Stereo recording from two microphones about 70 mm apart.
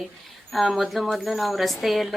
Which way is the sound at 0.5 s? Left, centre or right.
Centre.